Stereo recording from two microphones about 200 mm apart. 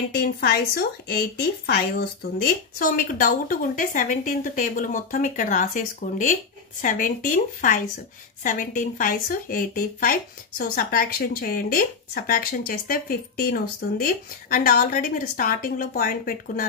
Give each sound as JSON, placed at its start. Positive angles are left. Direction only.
{"t": 0.1, "sound": "speech", "side_deg": 50}